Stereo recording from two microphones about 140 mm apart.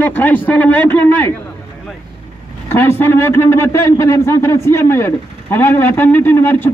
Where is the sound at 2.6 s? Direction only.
20° left (ahead or behind).